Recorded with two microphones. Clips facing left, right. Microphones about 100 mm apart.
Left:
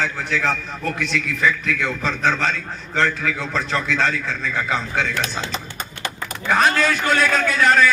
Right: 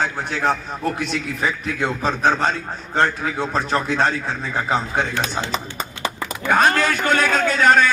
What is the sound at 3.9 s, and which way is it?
Speech, 55° right (ahead or behind).